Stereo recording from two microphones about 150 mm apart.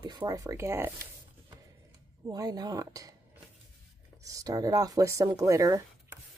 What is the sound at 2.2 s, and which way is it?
Speech, 25° right (ahead or behind).